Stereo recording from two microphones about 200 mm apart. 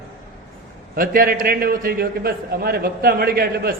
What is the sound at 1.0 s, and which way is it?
A man's voice, 45° right (ahead or behind).